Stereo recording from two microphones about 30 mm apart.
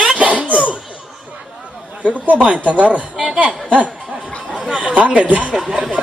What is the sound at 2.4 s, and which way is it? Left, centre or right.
Speech, right.